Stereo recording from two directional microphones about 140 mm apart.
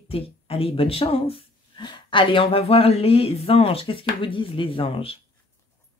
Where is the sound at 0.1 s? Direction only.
40° left (ahead or behind).